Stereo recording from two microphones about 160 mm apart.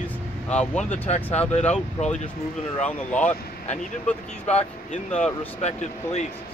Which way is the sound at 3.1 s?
10° left (ahead or behind).